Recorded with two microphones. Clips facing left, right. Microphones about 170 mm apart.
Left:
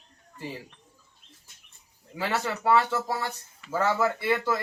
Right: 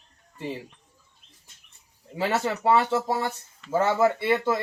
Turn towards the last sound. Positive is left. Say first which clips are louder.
# right 3 dB
turn(degrees=-25)  # may be behind; listen again after turning